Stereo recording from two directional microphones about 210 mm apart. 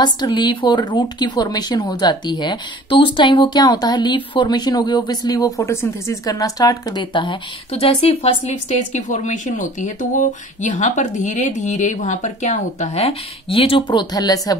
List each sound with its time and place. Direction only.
0.0 s a woman's voice: 20° left (ahead or behind)